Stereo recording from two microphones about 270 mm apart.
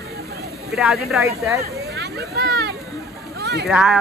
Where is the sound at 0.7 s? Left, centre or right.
Centre.